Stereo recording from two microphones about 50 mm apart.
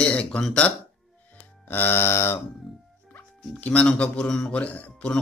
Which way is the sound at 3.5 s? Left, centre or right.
Left.